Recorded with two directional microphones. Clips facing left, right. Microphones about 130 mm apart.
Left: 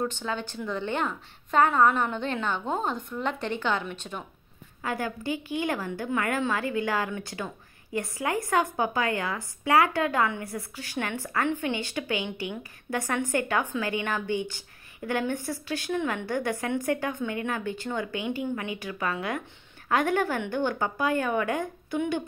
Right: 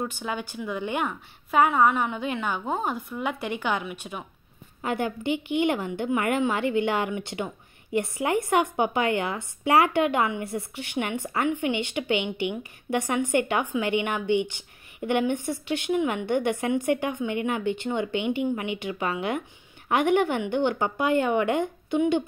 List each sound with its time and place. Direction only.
0.0 s a woman's voice: 10° right (ahead or behind)
4.8 s a woman's voice: 25° right (ahead or behind)